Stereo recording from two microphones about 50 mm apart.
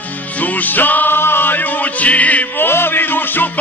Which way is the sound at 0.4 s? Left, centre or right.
Left.